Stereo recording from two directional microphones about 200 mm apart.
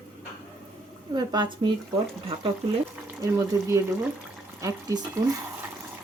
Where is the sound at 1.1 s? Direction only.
20° right (ahead or behind).